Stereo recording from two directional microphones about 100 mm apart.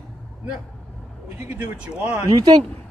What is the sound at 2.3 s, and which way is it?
Speech, 45° right (ahead or behind).